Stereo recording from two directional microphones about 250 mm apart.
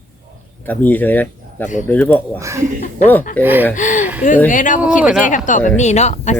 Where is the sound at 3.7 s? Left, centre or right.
Left.